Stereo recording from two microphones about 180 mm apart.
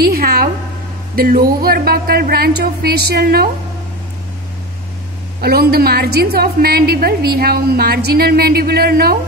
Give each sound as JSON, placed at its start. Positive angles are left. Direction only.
{"t": 0.0, "sound": "a sound", "side_deg": -55}
{"t": 1.1, "sound": "a woman's voice", "side_deg": -55}
{"t": 5.4, "sound": "a woman's voice", "side_deg": -60}